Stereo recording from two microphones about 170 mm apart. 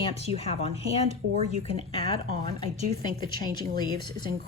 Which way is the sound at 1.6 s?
30° left (ahead or behind).